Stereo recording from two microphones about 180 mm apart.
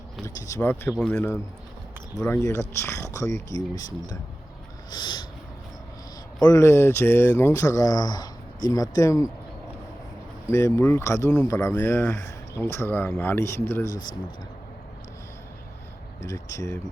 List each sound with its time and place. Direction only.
0.5 s speech: 10° left (ahead or behind)
4.9 s a sound: 25° left (ahead or behind)
6.4 s speech: 15° left (ahead or behind)
10.5 s speech: 15° left (ahead or behind)
16.2 s speech: 20° left (ahead or behind)